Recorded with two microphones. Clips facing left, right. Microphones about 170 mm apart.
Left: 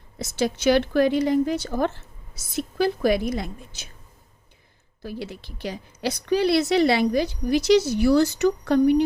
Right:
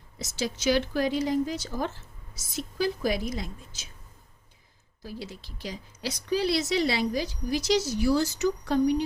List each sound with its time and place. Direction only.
0.2 s a woman's voice: 60° left (ahead or behind)
5.0 s a woman's voice: 65° left (ahead or behind)